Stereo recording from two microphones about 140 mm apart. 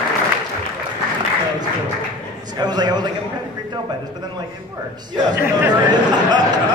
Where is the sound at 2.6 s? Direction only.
30° right (ahead or behind).